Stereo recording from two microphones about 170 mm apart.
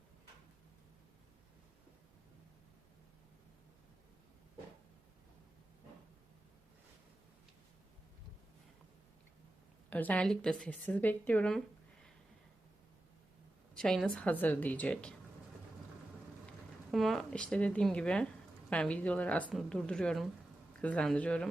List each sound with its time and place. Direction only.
9.9 s a woman's voice: 10° left (ahead or behind)
13.7 s a woman's voice: centre (ahead or behind)
16.9 s a woman's voice: centre (ahead or behind)